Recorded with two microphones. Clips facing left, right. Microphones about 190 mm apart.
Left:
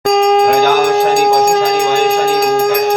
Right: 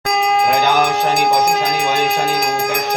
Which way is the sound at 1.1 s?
30° left (ahead or behind).